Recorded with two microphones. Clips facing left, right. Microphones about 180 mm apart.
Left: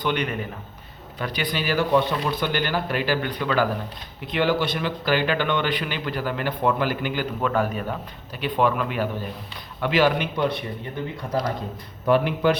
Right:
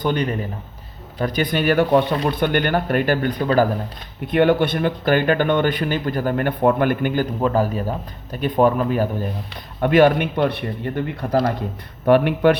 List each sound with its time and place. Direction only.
0.0 s a man's voice: 40° right (ahead or behind)
4.3 s speech: 55° right (ahead or behind)
7.4 s a man's voice: 35° right (ahead or behind)
9.8 s a man's voice: 55° right (ahead or behind)